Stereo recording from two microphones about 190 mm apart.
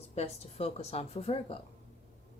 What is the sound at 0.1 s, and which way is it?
Speech, 35° left (ahead or behind).